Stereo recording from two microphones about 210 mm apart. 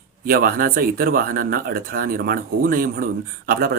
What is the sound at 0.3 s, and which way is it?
Speech, 45° right (ahead or behind).